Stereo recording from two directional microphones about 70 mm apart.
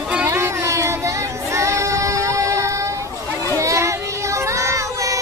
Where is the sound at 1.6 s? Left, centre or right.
Right.